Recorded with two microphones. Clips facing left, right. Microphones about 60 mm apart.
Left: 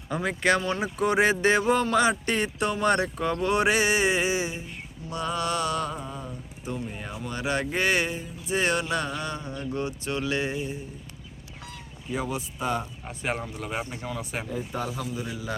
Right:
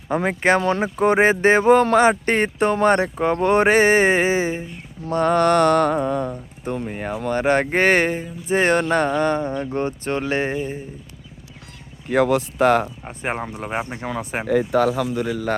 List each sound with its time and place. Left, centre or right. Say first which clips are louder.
0.1 s speech: right 6 dB; right
5.1 s mantra: right 12 dB; right
6.3 s speech: right 7 dB; right
12.0 s a man's voice: right 13 dB; right
13.1 s speech: right 5 dB; right
14.0 s speech: right 7 dB; right
14.4 s a man's voice: right 19 dB; right